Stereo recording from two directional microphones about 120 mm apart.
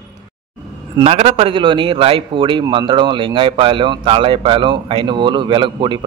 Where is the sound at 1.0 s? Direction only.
55° right (ahead or behind).